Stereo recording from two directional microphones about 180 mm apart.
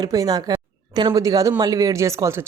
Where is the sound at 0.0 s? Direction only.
20° right (ahead or behind).